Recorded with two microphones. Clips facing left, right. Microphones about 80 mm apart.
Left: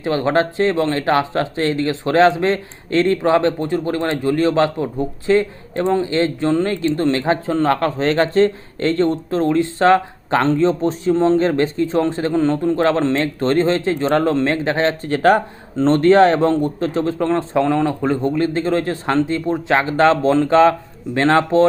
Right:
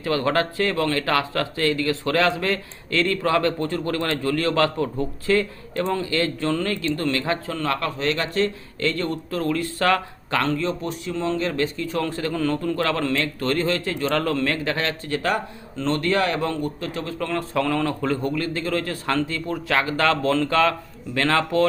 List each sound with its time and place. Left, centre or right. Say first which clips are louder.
0.0 s speech: left 5 dB; left